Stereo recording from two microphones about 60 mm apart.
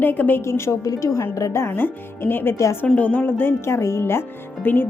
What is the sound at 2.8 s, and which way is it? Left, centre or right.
Speech, left.